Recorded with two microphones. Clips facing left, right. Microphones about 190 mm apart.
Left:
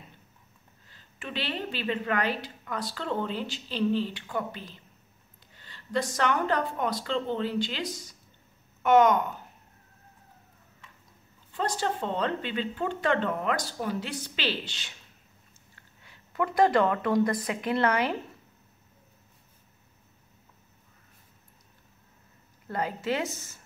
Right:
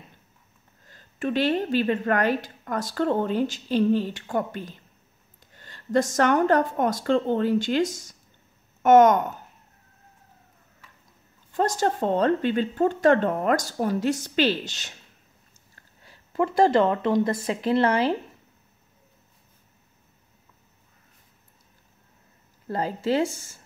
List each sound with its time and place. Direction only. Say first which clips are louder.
0.8 s a woman's voice: right 13 dB; 45° right (ahead or behind)
11.5 s a woman's voice: right 6 dB; 45° right (ahead or behind); by 18.1 s 30° right (ahead or behind)
22.7 s speech: right 5 dB; 30° right (ahead or behind)